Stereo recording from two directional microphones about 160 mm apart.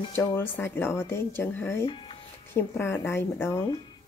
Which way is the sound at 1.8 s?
30° left (ahead or behind).